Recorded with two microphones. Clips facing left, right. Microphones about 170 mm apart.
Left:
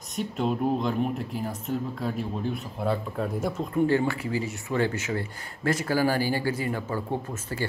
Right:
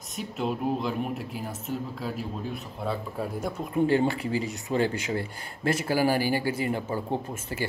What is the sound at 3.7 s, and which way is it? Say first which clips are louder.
A man's voice: right 1 dB; 20° right (ahead or behind).